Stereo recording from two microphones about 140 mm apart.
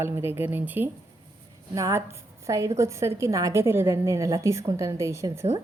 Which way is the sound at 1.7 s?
25° right (ahead or behind).